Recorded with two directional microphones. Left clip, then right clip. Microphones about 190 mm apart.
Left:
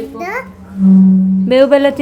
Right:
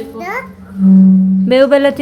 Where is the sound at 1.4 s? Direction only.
Centre (ahead or behind).